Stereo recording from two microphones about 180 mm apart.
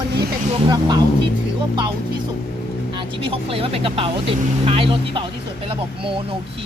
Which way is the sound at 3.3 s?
30° right (ahead or behind).